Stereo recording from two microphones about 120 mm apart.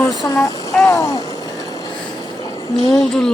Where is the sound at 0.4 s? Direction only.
25° left (ahead or behind).